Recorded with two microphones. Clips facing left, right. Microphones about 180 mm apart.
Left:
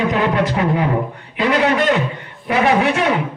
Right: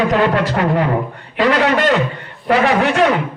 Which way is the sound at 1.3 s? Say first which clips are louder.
Right 2 dB; 60° right (ahead or behind).